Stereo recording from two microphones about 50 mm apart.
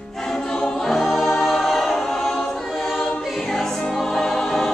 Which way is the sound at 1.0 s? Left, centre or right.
Centre.